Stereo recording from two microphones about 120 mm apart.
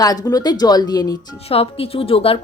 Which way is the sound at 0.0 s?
30° left (ahead or behind).